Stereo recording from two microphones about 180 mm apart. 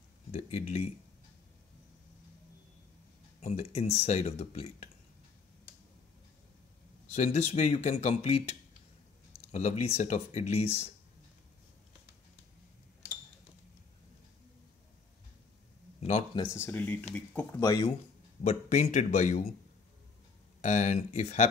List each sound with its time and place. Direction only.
0.3 s speech: 35° left (ahead or behind)
3.3 s speech: 35° left (ahead or behind)
7.1 s speech: 40° left (ahead or behind)
16.0 s a man's voice: 35° left (ahead or behind)
16.5 s speech: 10° left (ahead or behind)
18.4 s speech: 35° left (ahead or behind)
20.6 s speech: 40° left (ahead or behind)